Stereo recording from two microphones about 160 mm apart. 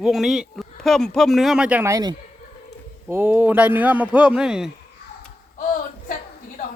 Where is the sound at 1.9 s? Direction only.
25° right (ahead or behind).